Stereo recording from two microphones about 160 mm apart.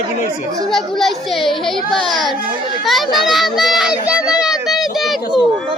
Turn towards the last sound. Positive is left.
turn(degrees=0)  # may be behind; listen again after turning